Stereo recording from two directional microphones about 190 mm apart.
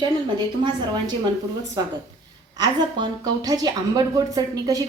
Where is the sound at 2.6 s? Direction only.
20° right (ahead or behind).